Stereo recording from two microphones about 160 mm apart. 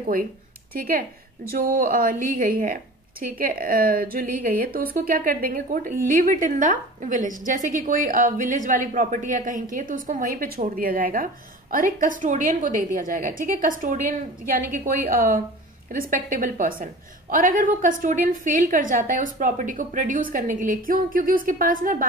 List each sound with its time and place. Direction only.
0.7 s a woman's voice: 60° right (ahead or behind)